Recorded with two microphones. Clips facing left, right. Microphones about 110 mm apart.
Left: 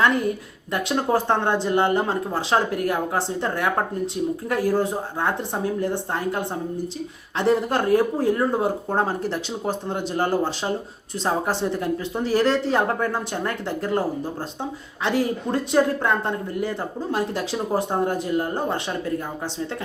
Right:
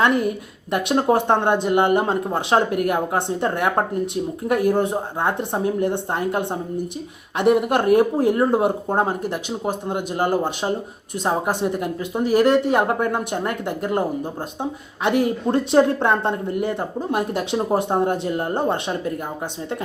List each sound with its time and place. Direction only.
0.0 s a woman's voice: 20° right (ahead or behind)